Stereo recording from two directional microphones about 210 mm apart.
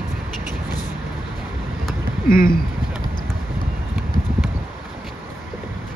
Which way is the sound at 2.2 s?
40° left (ahead or behind).